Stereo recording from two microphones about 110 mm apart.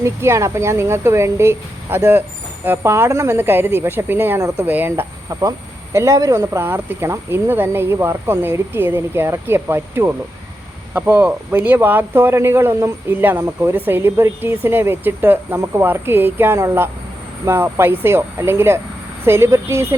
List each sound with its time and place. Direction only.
0.0 s speech: 25° right (ahead or behind)
5.3 s speech: 30° right (ahead or behind)